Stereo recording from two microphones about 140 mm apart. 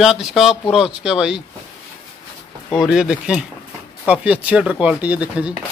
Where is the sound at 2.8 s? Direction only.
5° right (ahead or behind).